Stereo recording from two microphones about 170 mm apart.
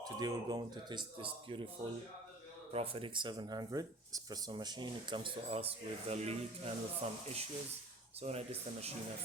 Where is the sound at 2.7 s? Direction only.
35° right (ahead or behind).